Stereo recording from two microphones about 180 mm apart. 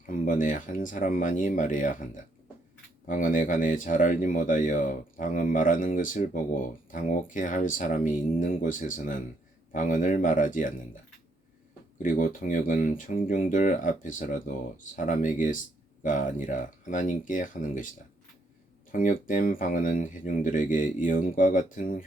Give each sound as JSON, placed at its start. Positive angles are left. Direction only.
{"t": 0.0, "sound": "speech", "side_deg": 45}
{"t": 3.1, "sound": "speech", "side_deg": 45}
{"t": 12.0, "sound": "speech", "side_deg": 50}
{"t": 18.9, "sound": "speech", "side_deg": 50}